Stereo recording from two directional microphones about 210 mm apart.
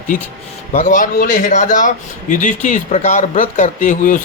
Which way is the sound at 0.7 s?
35° left (ahead or behind).